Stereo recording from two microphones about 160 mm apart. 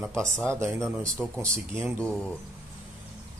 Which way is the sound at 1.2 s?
10° right (ahead or behind).